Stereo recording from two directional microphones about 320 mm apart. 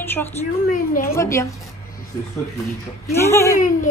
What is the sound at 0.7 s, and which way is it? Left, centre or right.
Speech, left.